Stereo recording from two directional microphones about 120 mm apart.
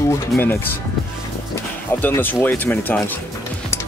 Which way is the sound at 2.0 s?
15° left (ahead or behind).